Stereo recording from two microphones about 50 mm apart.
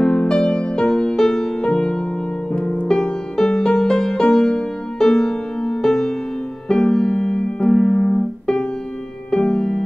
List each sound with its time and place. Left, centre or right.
0.0 s music: centre
6.7 s keyboard: centre
9.3 s music: centre